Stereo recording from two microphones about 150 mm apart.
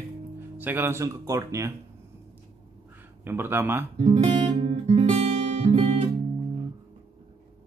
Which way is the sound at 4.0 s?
50° right (ahead or behind).